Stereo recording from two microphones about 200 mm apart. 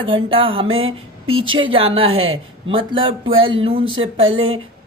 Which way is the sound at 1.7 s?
30° right (ahead or behind).